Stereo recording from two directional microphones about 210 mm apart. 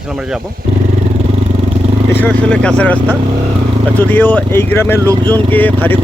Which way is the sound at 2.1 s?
5° left (ahead or behind).